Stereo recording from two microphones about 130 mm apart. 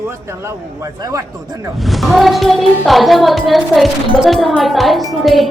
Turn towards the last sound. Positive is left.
turn(degrees=0)  # may be behind; listen again after turning